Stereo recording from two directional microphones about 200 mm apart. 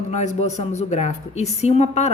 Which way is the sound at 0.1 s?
35° left (ahead or behind).